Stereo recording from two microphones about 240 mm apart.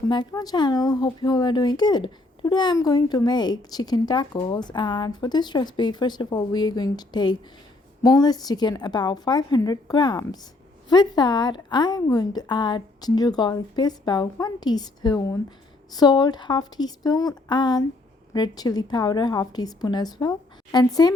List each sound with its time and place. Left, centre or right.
0.1 s speech: centre